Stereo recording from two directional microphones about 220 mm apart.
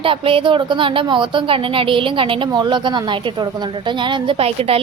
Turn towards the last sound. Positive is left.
turn(degrees=-25)  # may be behind; listen again after turning